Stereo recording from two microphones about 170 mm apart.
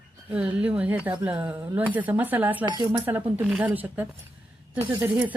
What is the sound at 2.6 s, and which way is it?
Speech, 25° right (ahead or behind).